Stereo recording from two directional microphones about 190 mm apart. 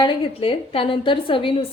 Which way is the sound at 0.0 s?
25° left (ahead or behind).